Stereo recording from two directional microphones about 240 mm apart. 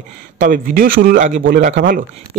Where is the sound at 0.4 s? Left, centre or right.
Right.